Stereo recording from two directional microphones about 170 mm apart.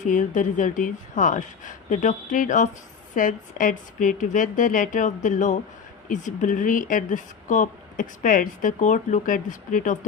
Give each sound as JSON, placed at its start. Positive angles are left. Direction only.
{"t": 0.0, "sound": "speech", "side_deg": 50}